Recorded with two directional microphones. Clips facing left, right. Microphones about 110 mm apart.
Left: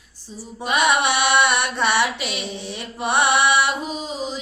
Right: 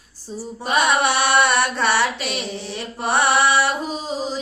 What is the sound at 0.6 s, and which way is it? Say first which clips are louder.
Chant: right 1 dB; 40° right (ahead or behind).